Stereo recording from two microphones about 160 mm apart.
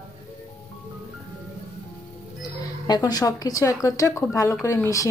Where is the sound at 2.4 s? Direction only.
25° left (ahead or behind).